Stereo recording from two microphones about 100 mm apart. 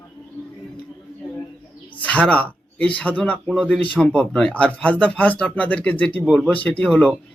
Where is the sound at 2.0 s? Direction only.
15° left (ahead or behind).